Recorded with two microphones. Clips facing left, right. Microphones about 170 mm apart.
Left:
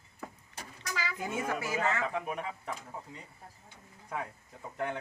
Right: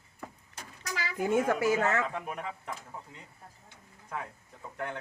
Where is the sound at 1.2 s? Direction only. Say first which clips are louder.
Right 10 dB; 50° right (ahead or behind).